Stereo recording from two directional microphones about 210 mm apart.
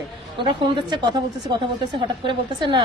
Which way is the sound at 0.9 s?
20° right (ahead or behind).